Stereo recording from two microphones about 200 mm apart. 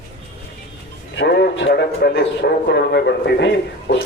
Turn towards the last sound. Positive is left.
turn(degrees=60)  # may be behind; listen again after turning